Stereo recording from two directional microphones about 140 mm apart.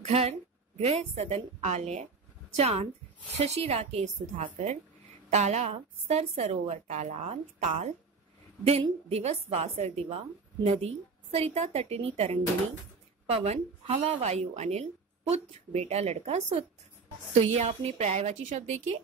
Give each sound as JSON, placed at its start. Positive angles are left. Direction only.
{"t": 0.0, "sound": "a woman's voice", "side_deg": -50}
{"t": 9.1, "sound": "a woman's voice", "side_deg": -45}